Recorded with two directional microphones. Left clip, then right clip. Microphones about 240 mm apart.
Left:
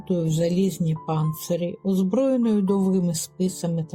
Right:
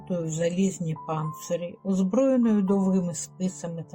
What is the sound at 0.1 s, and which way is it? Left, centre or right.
Speech, left.